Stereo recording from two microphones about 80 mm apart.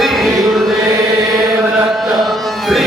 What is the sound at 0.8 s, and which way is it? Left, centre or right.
Chant, right.